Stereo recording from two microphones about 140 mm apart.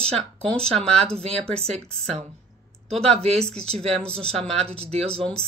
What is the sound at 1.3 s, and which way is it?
Speech, 5° left (ahead or behind).